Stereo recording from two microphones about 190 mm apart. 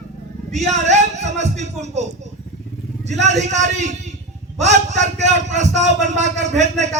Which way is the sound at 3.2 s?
35° right (ahead or behind).